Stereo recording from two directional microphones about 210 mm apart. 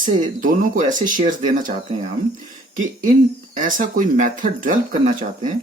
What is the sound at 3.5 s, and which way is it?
Speech, 40° right (ahead or behind).